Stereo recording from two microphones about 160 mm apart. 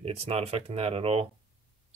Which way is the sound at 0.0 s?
40° right (ahead or behind).